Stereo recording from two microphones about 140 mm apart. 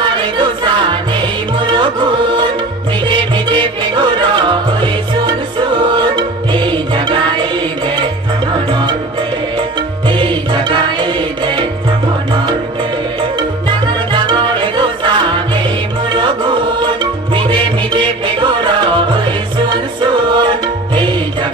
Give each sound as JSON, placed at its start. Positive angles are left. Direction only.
{"t": 0.0, "sound": "music", "side_deg": -35}
{"t": 10.0, "sound": "music", "side_deg": -35}
{"t": 13.4, "sound": "music", "side_deg": -35}